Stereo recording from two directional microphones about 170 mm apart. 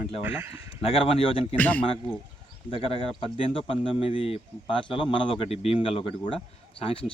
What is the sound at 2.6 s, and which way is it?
A man's voice, 35° left (ahead or behind).